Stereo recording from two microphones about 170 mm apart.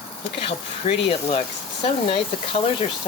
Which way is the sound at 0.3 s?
35° left (ahead or behind).